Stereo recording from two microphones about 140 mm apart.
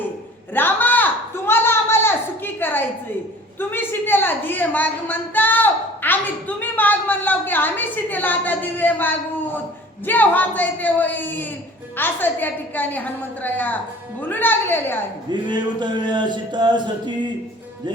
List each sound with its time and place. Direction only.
0.5 s a sound: 15° left (ahead or behind)
6.6 s a woman's voice: 10° left (ahead or behind)
15.3 s speech: 30° right (ahead or behind)